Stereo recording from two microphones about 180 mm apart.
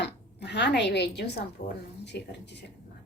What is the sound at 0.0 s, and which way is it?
Speech, 70° left (ahead or behind).